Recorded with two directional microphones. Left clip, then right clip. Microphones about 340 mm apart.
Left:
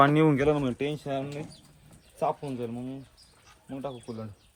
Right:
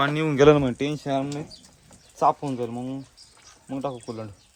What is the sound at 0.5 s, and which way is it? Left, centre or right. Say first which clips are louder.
Speech: right 6 dB; right.